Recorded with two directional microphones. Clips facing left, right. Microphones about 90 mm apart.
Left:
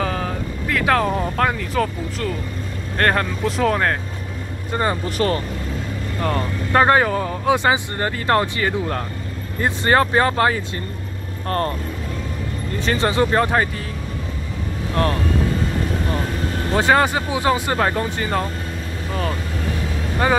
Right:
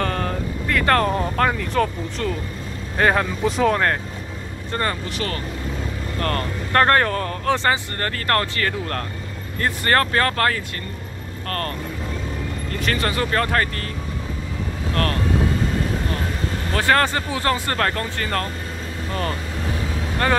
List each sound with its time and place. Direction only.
0.0 s speech: 5° left (ahead or behind)
5.1 s speech: 35° left (ahead or behind)
6.1 s speech: 10° left (ahead or behind)
12.7 s speech: 25° left (ahead or behind)
16.7 s speech: 15° left (ahead or behind)
20.2 s speech: 10° left (ahead or behind)